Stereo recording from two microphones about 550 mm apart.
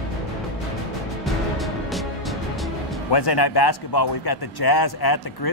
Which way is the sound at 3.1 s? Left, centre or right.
Left.